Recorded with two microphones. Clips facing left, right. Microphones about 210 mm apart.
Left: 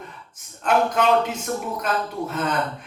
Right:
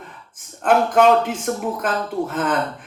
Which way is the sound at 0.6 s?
50° right (ahead or behind).